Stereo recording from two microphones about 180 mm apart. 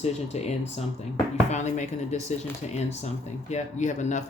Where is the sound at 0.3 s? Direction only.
35° left (ahead or behind).